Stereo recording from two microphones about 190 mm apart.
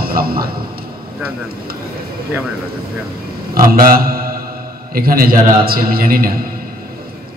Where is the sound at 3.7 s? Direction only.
50° right (ahead or behind).